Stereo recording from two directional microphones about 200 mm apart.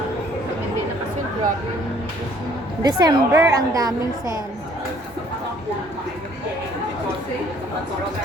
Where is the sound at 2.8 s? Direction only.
20° right (ahead or behind).